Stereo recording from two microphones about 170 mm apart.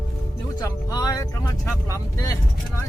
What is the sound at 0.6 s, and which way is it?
Speech, 20° left (ahead or behind).